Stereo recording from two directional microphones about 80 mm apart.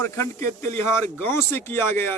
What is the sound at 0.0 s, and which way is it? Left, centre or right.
A man's voice, left.